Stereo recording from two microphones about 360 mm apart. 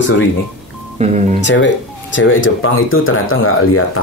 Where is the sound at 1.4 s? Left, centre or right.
Left.